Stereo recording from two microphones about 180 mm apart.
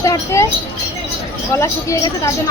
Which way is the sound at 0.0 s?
15° left (ahead or behind).